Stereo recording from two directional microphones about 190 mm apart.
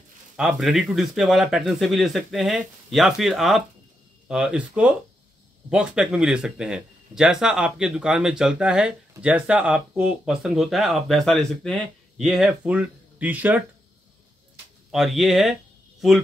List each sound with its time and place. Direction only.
0.4 s speech: centre (ahead or behind)
14.9 s speech: centre (ahead or behind)